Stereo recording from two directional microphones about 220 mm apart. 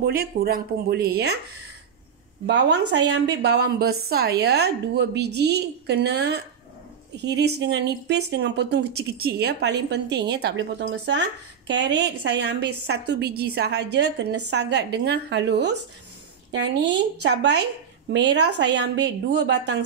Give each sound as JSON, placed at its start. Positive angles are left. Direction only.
{"t": 0.0, "sound": "speech", "side_deg": -45}
{"t": 2.4, "sound": "speech", "side_deg": -50}